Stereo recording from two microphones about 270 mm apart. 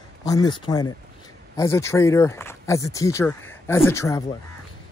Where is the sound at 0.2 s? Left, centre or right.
Centre.